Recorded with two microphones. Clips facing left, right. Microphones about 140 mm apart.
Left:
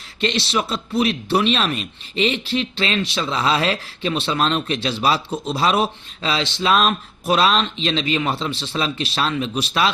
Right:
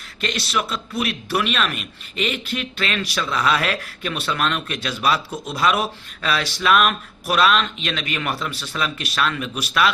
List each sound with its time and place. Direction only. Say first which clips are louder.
0.2 s speech: left 3 dB; 25° left (ahead or behind)